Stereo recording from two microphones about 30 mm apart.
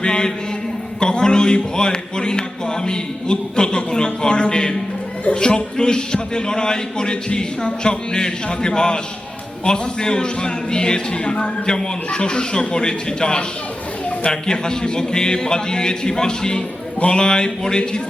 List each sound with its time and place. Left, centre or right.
0.0 s a man's voice: left